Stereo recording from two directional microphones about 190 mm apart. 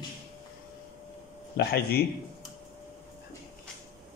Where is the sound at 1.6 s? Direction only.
55° left (ahead or behind).